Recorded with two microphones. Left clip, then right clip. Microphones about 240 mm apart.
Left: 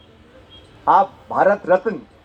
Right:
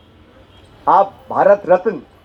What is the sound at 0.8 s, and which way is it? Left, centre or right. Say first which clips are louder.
Speech: right 2 dB; right.